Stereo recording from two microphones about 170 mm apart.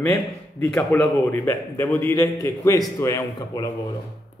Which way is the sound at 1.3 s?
15° left (ahead or behind).